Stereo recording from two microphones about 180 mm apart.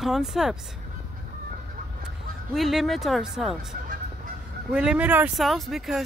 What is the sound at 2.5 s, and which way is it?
Speech, centre (ahead or behind).